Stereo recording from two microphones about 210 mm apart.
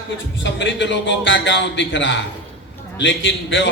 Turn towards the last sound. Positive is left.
turn(degrees=60)  # may be behind; listen again after turning